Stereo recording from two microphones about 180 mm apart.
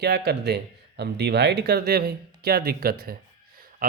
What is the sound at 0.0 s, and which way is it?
Speech, 65° right (ahead or behind).